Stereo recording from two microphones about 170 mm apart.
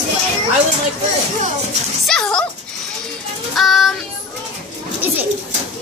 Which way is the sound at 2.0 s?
5° left (ahead or behind).